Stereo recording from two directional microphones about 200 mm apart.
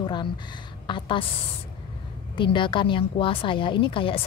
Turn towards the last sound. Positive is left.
turn(degrees=25)  # may be behind; listen again after turning